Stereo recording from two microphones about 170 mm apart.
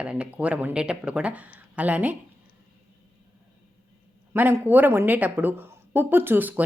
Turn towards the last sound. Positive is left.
turn(degrees=-10)  # may be behind; listen again after turning